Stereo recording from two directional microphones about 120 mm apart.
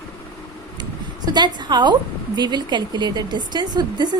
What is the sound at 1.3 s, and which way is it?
Speech, 40° right (ahead or behind).